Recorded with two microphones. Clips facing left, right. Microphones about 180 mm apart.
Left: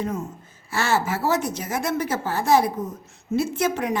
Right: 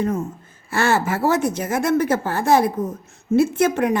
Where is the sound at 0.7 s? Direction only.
55° right (ahead or behind).